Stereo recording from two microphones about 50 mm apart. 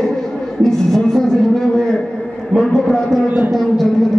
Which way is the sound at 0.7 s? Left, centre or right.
Centre.